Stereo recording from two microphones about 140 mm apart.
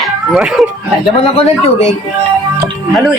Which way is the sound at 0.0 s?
5° right (ahead or behind).